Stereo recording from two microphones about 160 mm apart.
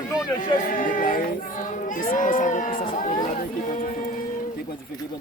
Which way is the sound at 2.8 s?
35° left (ahead or behind).